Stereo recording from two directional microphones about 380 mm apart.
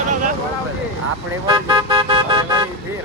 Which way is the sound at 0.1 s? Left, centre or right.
Centre.